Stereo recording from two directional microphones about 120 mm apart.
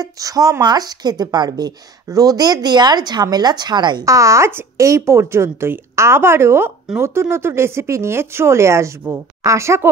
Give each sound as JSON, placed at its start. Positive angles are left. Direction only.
{"t": 0.0, "sound": "speech", "side_deg": -30}